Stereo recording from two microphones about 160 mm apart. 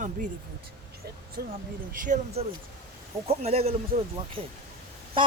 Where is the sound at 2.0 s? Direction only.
50° right (ahead or behind).